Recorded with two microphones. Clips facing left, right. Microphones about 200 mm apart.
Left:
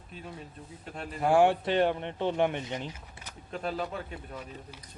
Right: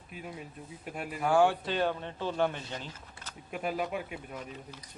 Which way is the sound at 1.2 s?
25° left (ahead or behind).